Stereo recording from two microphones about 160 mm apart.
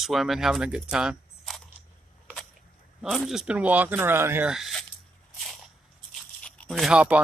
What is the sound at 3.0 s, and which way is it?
Speech, 5° right (ahead or behind).